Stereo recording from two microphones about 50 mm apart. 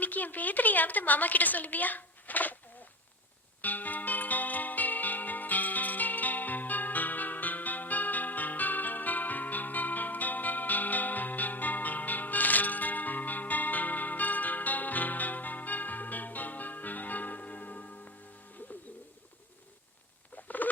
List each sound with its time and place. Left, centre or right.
0.0 s a woman's voice: left
3.6 s music: left
20.3 s a sound: left